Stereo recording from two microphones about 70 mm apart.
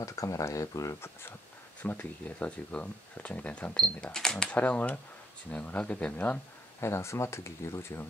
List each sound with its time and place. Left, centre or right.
0.0 s speech: left
1.8 s speech: left
4.0 s speech: centre
4.6 s speech: left
6.8 s speech: left